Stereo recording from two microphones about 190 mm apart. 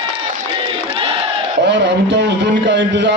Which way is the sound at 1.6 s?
65° right (ahead or behind).